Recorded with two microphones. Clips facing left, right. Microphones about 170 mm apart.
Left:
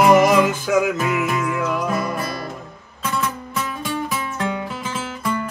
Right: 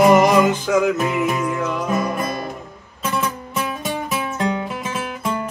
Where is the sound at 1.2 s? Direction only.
25° right (ahead or behind).